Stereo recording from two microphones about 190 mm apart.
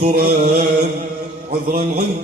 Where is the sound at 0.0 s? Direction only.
45° right (ahead or behind).